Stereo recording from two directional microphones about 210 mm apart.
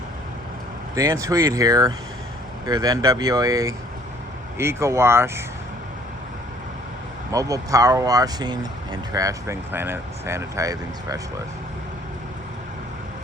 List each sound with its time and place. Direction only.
0.9 s speech: 15° right (ahead or behind)
7.3 s speech: 15° right (ahead or behind)